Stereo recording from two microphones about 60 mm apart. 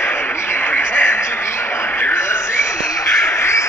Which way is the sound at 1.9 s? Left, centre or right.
Left.